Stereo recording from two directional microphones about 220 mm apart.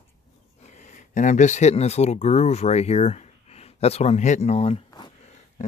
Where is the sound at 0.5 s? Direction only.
30° left (ahead or behind).